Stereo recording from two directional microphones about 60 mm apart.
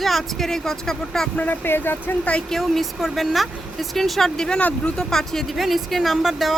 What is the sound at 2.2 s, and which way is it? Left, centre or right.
Speech, left.